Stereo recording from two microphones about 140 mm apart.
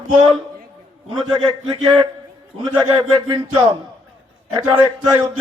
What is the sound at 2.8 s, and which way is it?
Speech, 35° right (ahead or behind).